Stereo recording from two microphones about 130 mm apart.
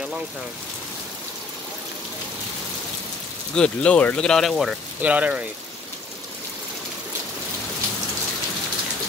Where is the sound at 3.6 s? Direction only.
10° left (ahead or behind).